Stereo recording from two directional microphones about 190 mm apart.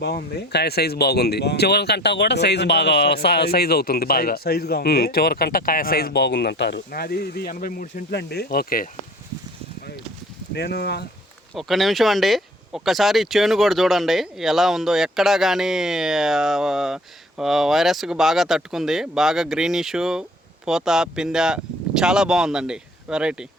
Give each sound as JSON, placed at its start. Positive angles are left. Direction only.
{"t": 0.0, "sound": "speech", "side_deg": 60}
{"t": 10.5, "sound": "speech", "side_deg": 60}
{"t": 11.5, "sound": "speech", "side_deg": 0}